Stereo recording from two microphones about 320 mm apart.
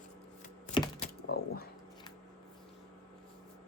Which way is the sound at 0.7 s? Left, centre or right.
Centre.